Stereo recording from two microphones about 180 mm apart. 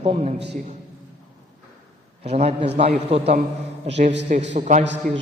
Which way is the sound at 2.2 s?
35° right (ahead or behind).